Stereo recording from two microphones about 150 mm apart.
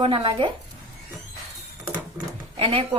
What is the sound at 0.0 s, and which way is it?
Speech, 35° right (ahead or behind).